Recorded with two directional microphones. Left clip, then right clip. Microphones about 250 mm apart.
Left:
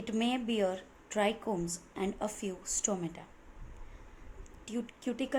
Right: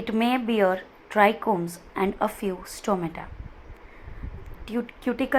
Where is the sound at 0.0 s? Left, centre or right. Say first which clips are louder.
Right 9 dB; centre.